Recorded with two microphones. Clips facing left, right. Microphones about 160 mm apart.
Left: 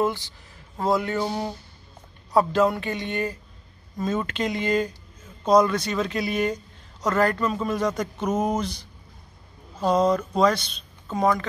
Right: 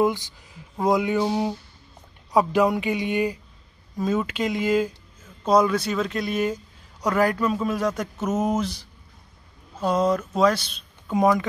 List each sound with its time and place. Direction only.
0.0 s a man's voice: 15° right (ahead or behind)
9.8 s a man's voice: 5° right (ahead or behind)
11.1 s speech: 15° right (ahead or behind)